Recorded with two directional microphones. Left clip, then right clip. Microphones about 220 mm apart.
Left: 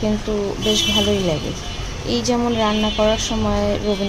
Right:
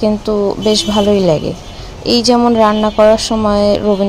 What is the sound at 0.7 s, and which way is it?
A woman's voice, 40° right (ahead or behind).